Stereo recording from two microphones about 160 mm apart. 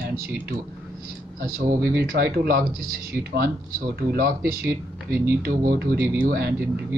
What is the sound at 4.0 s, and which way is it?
Speech, 70° right (ahead or behind).